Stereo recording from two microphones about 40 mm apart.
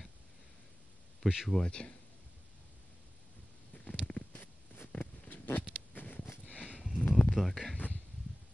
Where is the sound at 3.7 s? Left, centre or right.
Left.